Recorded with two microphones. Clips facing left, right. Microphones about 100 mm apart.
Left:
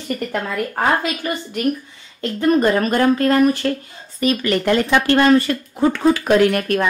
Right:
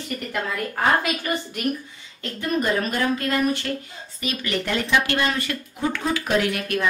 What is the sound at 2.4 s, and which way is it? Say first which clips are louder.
Speech: left 7 dB; 50° left (ahead or behind).